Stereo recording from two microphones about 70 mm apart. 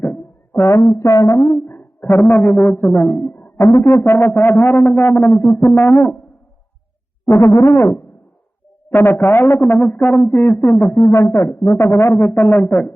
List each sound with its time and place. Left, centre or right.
0.5 s speech: left
1.1 s a sound: left
1.4 s speech: left
1.6 s a sound: left
3.6 s speech: left
5.4 s speech: left
5.7 s a sound: left
7.3 s speech: left
8.9 s speech: left
10.6 s speech: left